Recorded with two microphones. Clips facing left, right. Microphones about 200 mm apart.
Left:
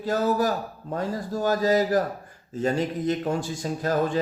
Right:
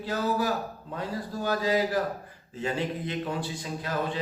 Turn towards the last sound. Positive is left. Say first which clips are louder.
# left 6 dB
turn(degrees=45)  # may be behind; listen again after turning